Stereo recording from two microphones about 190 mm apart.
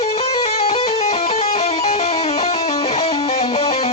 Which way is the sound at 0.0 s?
35° left (ahead or behind).